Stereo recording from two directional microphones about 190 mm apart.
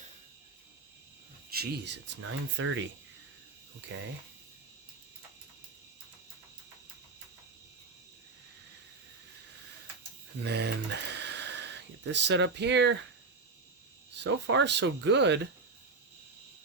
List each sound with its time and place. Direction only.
1.5 s speech: 55° right (ahead or behind); by 2.8 s 90° right
10.4 s speech: 60° right (ahead or behind)
14.3 s speech: 75° right (ahead or behind)